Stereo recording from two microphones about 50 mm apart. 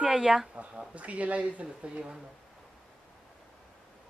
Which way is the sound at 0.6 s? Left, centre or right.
Right.